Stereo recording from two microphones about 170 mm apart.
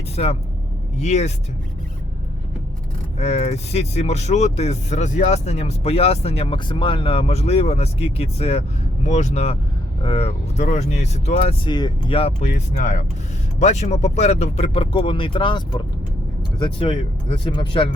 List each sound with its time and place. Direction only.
0.2 s speech: 45° left (ahead or behind)
3.2 s speech: 40° left (ahead or behind)